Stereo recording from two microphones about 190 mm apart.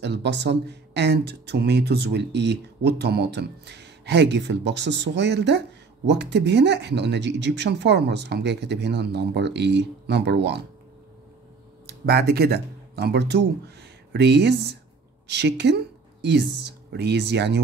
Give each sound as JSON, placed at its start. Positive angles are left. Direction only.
{"t": 0.0, "sound": "speech", "side_deg": -65}
{"t": 11.8, "sound": "speech", "side_deg": -55}